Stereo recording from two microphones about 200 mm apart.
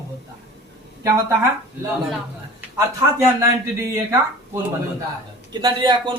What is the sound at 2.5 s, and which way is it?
Speech, 15° right (ahead or behind).